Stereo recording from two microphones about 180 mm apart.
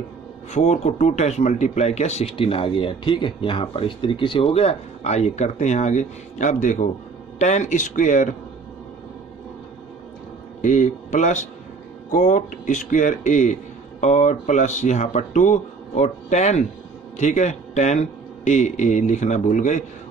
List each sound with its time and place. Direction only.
0.5 s a man's voice: 40° left (ahead or behind)
10.6 s a man's voice: 45° left (ahead or behind)